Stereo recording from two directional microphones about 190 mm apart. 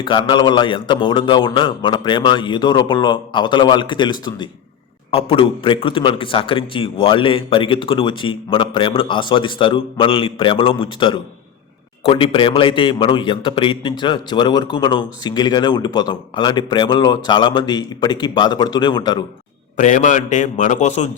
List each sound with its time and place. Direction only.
0.0 s a man's voice: 25° left (ahead or behind)
19.7 s a man's voice: 40° left (ahead or behind)